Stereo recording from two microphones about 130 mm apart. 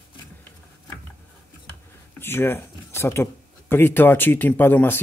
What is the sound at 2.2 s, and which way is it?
Speech, 20° left (ahead or behind).